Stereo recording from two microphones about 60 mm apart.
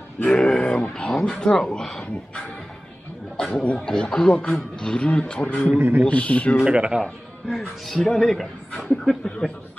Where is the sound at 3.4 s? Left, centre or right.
Centre.